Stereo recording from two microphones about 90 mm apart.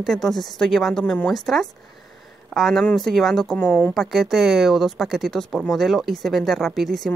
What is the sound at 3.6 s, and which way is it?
Speech, 20° left (ahead or behind).